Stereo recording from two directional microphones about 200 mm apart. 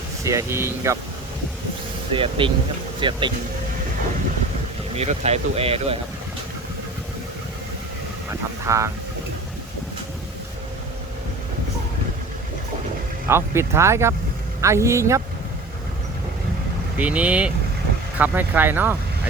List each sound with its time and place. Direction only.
0.3 s speech: 15° right (ahead or behind)
2.1 s speech: 25° right (ahead or behind)
4.9 s speech: 30° right (ahead or behind)
8.6 s speech: 15° right (ahead or behind)
13.2 s speech: 10° right (ahead or behind)
17.0 s speech: 5° right (ahead or behind)